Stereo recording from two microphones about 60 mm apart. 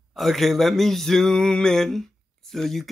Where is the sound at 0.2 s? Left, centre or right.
Centre.